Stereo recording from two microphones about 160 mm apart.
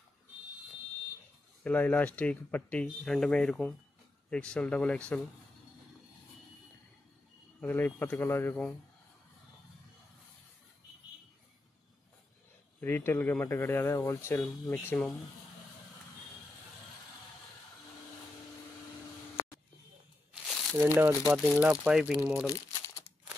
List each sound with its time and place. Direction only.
1.6 s speech: 10° left (ahead or behind)
7.6 s speech: 10° left (ahead or behind)
12.8 s speech: 15° left (ahead or behind)
20.7 s speech: 15° right (ahead or behind)
22.5 s crumpling: 20° left (ahead or behind)